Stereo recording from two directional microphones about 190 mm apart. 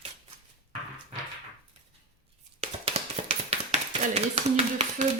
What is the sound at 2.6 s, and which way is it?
Tap, 30° right (ahead or behind).